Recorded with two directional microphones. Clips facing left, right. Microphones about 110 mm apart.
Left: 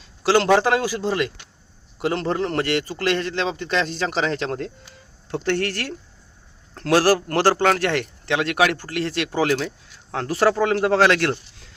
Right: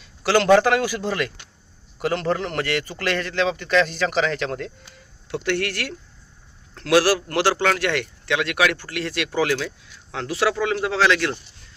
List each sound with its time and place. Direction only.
0.2 s a man's voice: 30° left (ahead or behind); by 11.3 s 50° left (ahead or behind)